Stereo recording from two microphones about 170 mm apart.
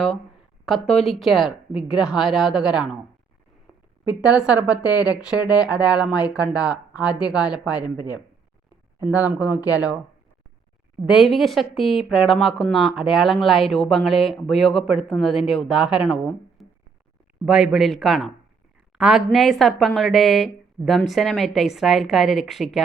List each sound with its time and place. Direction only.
0.6 s speech: centre (ahead or behind)
4.0 s speech: 5° right (ahead or behind)
9.0 s speech: 10° right (ahead or behind)
11.0 s speech: centre (ahead or behind)